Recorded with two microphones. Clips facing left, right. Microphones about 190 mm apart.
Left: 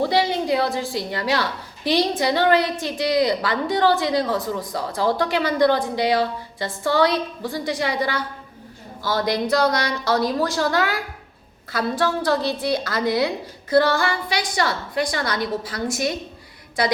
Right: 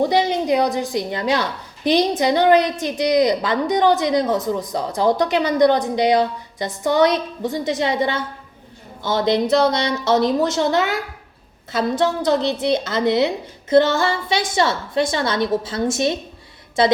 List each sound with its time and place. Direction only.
0.0 s a woman's voice: 20° right (ahead or behind)